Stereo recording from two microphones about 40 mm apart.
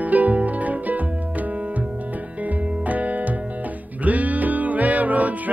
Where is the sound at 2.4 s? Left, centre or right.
Right.